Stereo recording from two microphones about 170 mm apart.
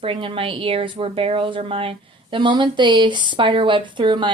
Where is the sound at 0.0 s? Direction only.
30° right (ahead or behind).